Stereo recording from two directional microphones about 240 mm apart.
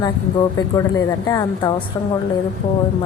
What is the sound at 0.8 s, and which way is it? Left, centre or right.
Speech, centre.